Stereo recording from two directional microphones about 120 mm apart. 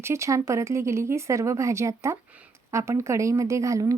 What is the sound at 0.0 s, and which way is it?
Speech, 25° right (ahead or behind).